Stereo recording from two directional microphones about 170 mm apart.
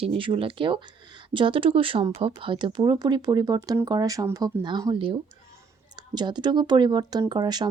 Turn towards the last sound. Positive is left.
turn(degrees=-25)  # may be behind; listen again after turning